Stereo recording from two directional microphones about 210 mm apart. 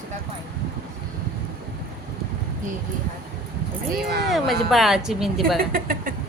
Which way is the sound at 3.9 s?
50° right (ahead or behind).